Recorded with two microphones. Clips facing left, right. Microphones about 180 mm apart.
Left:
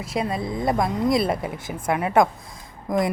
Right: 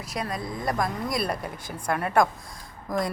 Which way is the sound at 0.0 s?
25° left (ahead or behind).